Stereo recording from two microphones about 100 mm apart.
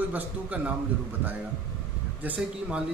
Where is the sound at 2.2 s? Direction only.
10° right (ahead or behind).